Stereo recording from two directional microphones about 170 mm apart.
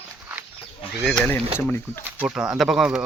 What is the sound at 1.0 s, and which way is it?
Speech, 5° left (ahead or behind).